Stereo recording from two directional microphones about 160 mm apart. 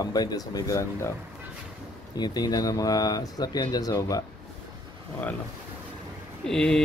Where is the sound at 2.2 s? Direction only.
25° left (ahead or behind).